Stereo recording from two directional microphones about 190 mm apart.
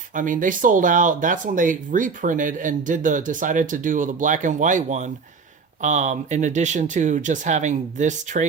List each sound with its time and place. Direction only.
0.1 s speech: 45° right (ahead or behind)